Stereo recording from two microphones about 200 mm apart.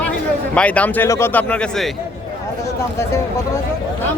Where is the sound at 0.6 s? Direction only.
5° left (ahead or behind).